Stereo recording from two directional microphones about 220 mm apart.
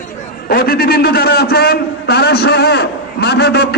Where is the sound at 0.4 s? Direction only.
45° left (ahead or behind).